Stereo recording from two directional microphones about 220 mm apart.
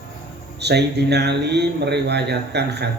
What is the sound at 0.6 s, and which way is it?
Speech, 50° right (ahead or behind).